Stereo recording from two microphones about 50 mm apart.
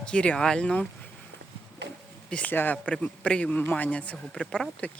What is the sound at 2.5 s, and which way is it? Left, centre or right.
Speech, left.